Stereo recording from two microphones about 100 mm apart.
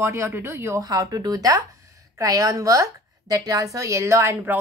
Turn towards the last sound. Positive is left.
turn(degrees=-25)  # may be behind; listen again after turning